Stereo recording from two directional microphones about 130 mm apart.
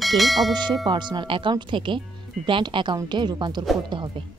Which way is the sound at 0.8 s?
35° right (ahead or behind).